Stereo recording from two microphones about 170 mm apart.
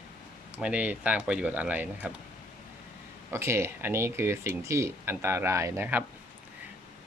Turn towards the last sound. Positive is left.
turn(degrees=-15)  # may be behind; listen again after turning